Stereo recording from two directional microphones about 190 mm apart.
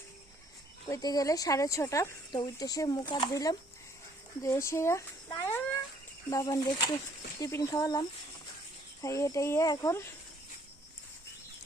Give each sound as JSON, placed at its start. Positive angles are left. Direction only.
{"t": 0.9, "sound": "speech", "side_deg": 20}